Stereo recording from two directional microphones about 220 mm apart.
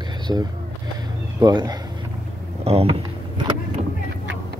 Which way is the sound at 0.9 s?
20° right (ahead or behind).